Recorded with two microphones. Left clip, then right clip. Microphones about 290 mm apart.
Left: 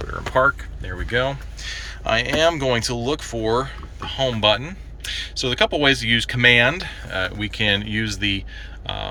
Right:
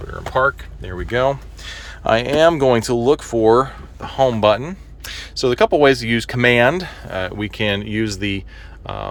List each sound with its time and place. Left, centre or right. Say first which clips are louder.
0.3 s speech: right 1 dB; centre
1.6 s speech: right 5 dB; right